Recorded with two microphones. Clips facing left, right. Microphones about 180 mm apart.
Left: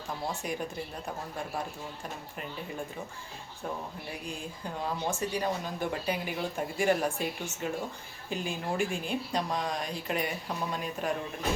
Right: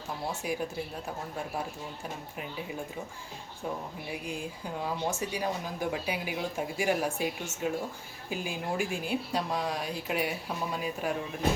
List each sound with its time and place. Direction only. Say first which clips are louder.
0.3 s speech: right 2 dB; 5° right (ahead or behind)
2.4 s speech: right 1 dB; 5° right (ahead or behind)
4.1 s speech: right 5 dB; 10° right (ahead or behind)